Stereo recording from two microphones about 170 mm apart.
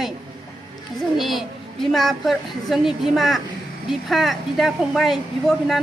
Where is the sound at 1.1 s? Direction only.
Centre (ahead or behind).